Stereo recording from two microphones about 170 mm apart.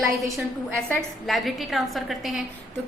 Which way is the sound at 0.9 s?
Centre (ahead or behind).